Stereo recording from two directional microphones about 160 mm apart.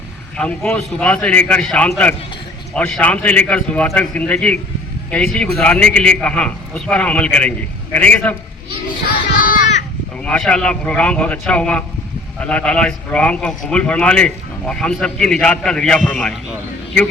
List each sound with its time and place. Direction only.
0.3 s a man's voice: 5° left (ahead or behind)
9.0 s a sound: 60° left (ahead or behind)
10.2 s a man's voice: 5° left (ahead or behind)